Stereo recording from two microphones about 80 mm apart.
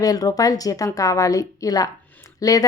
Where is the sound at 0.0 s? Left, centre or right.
Left.